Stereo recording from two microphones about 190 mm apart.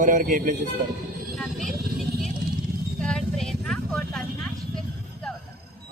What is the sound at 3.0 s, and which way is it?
Vehicle, 5° left (ahead or behind).